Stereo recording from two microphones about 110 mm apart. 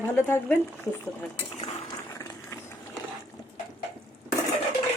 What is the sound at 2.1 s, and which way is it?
Run, 30° left (ahead or behind).